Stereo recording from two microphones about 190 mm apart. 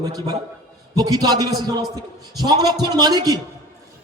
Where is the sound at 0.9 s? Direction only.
20° right (ahead or behind).